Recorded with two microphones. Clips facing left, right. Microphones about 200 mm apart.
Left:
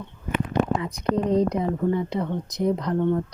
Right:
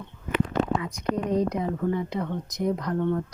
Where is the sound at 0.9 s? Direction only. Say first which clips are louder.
Left 4 dB; 60° left (ahead or behind).